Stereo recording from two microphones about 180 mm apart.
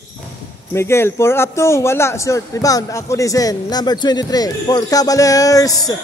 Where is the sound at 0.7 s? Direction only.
15° left (ahead or behind).